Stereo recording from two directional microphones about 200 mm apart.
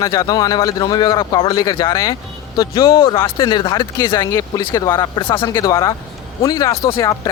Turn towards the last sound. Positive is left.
turn(degrees=15)  # may be behind; listen again after turning